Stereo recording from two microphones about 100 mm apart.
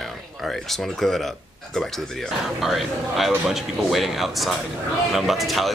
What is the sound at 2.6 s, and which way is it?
Speech, centre (ahead or behind).